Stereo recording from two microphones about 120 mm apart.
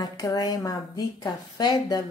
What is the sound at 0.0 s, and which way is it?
A woman's voice, 30° left (ahead or behind).